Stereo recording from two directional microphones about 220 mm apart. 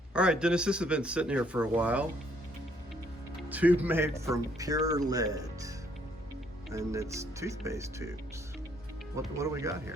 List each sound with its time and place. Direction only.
0.1 s speech: 5° right (ahead or behind)
3.5 s speech: 5° right (ahead or behind)
6.7 s speech: 15° right (ahead or behind)
9.4 s speech: 15° right (ahead or behind)